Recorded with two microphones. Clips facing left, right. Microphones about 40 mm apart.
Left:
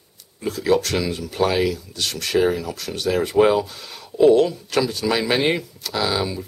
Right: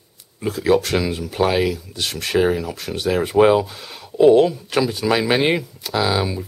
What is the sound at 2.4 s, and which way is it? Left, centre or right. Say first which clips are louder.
Speech: right 1 dB; centre.